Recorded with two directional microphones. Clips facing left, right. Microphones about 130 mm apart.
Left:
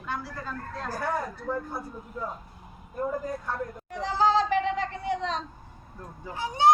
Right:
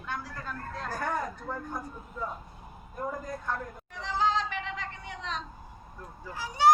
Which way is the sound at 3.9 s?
35° left (ahead or behind).